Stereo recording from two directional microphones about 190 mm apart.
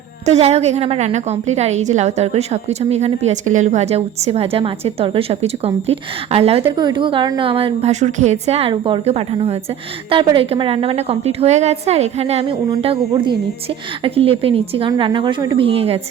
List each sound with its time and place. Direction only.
0.3 s a woman's voice: 35° right (ahead or behind)